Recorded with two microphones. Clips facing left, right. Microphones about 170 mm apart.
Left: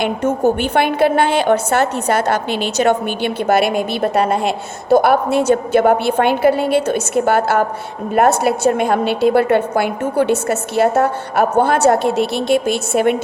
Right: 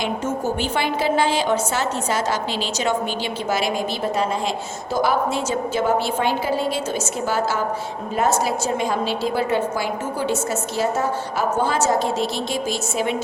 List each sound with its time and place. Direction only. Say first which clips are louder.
0.0 s a woman's voice: left 8 dB; 60° left (ahead or behind)